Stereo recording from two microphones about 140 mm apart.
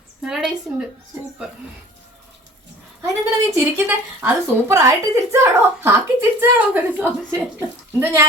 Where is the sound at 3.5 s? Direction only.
15° right (ahead or behind).